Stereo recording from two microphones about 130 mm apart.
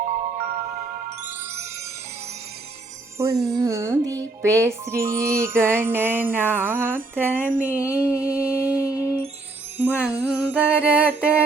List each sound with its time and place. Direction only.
0.0 s music: 75° right (ahead or behind)
3.2 s music: 20° right (ahead or behind)